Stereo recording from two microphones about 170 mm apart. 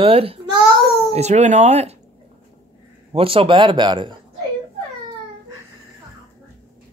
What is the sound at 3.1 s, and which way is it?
A man's voice, 35° right (ahead or behind).